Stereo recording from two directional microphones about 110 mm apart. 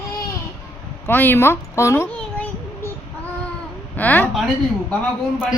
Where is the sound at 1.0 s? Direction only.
20° left (ahead or behind).